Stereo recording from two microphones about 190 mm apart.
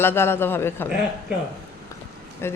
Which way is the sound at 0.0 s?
10° left (ahead or behind).